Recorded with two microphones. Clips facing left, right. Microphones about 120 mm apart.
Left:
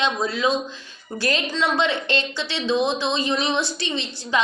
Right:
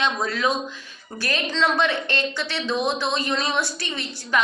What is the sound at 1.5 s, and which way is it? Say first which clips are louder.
A woman's voice: right 3 dB; 10° left (ahead or behind).